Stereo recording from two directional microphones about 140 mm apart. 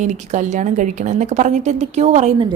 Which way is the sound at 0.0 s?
60° right (ahead or behind).